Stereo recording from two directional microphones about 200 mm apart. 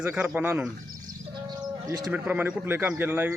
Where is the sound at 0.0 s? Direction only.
5° right (ahead or behind).